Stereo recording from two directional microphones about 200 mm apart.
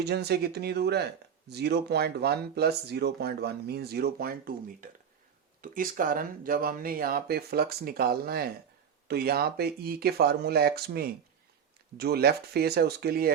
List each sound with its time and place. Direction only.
0.0 s speech: 55° right (ahead or behind)